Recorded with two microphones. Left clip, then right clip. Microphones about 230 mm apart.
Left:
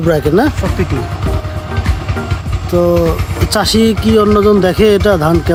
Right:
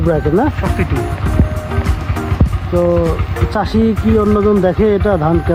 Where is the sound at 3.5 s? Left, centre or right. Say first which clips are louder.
Left 4 dB; left.